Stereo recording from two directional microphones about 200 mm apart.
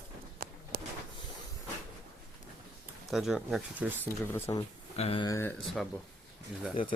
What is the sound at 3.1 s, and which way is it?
Speech, centre (ahead or behind).